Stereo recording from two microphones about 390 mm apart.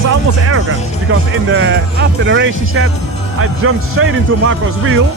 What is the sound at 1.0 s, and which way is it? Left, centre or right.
Speech, right.